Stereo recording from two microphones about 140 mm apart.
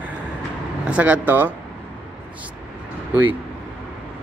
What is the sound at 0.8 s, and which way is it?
Speech, 10° right (ahead or behind).